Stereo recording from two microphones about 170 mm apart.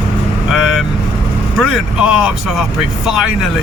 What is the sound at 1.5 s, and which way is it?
Speech, 5° right (ahead or behind).